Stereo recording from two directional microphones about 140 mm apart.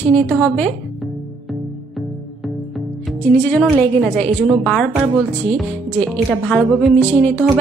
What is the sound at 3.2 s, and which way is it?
A woman's voice, 15° left (ahead or behind).